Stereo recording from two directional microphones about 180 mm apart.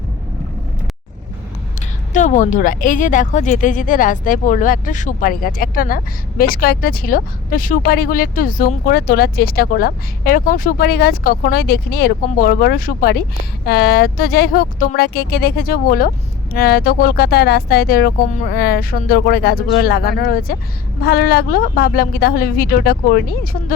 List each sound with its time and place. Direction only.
2.1 s speech: 40° left (ahead or behind)